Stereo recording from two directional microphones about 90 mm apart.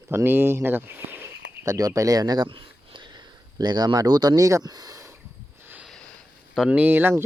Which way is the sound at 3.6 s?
50° right (ahead or behind).